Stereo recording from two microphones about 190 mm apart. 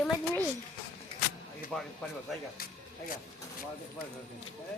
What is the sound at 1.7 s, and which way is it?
Speech, 5° left (ahead or behind).